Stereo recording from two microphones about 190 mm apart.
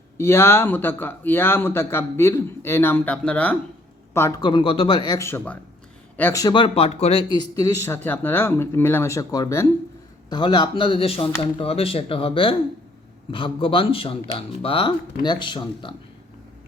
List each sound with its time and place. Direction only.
0.2 s speech: 15° left (ahead or behind)